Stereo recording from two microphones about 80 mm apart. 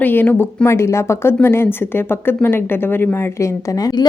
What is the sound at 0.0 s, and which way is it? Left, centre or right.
Speech, left.